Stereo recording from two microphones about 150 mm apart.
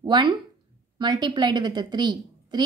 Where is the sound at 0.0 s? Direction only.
30° right (ahead or behind).